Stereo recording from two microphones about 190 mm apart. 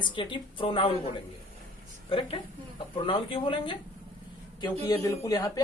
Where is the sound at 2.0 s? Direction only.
25° left (ahead or behind).